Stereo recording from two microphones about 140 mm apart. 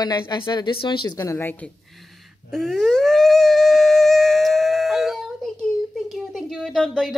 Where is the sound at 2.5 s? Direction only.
Centre (ahead or behind).